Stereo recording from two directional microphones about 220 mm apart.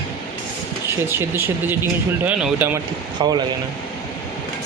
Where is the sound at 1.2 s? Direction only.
10° right (ahead or behind).